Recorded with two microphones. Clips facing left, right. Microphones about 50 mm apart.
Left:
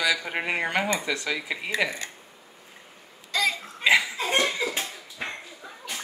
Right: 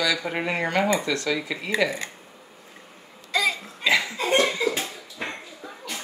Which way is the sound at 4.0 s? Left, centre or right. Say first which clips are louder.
Right 3 dB; centre.